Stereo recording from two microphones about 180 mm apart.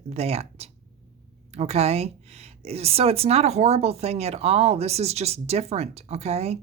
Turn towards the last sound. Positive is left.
turn(degrees=-35)  # may be behind; listen again after turning